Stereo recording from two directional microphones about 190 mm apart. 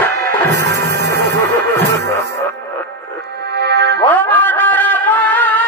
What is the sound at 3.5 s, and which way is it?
Music, 60° right (ahead or behind).